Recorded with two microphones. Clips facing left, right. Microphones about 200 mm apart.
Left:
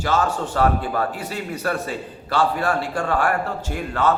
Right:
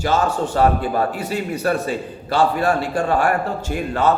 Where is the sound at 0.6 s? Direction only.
20° right (ahead or behind).